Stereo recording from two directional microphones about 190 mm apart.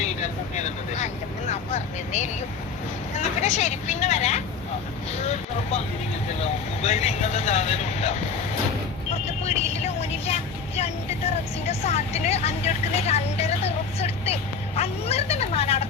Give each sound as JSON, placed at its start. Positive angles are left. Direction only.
{"t": 0.0, "sound": "speech", "side_deg": 35}
{"t": 3.4, "sound": "speech", "side_deg": 35}
{"t": 6.4, "sound": "speech", "side_deg": 35}
{"t": 9.4, "sound": "speech", "side_deg": 35}
{"t": 11.6, "sound": "speech", "side_deg": 35}